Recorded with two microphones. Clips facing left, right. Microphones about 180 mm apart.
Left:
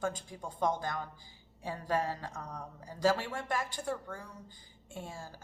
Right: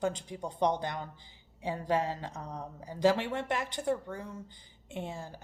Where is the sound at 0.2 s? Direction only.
20° right (ahead or behind).